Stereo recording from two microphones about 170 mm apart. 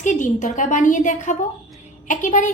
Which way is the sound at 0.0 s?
45° left (ahead or behind).